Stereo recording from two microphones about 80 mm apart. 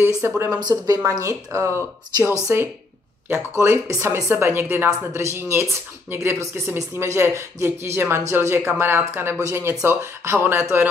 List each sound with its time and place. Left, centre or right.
0.2 s a woman's voice: right
0.6 s a woman's voice: right